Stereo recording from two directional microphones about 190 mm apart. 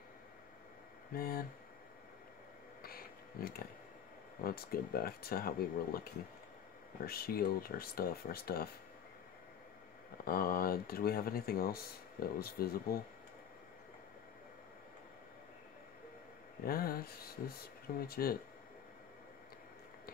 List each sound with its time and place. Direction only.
1.1 s speech: 50° left (ahead or behind)
2.8 s a sound: 50° left (ahead or behind)
4.4 s speech: 50° left (ahead or behind)
7.1 s speech: 50° left (ahead or behind)
10.2 s speech: 50° left (ahead or behind)
16.6 s speech: 50° left (ahead or behind)